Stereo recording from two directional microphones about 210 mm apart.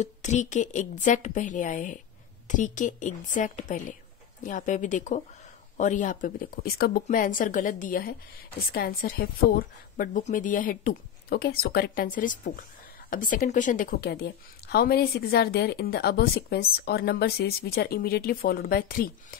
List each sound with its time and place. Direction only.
0.0 s a woman's voice: 35° left (ahead or behind)